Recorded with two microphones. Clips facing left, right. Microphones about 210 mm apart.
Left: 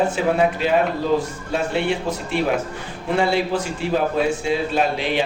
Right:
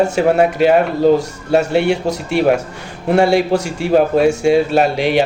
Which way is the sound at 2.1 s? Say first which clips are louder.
Right 7 dB; 75° right (ahead or behind).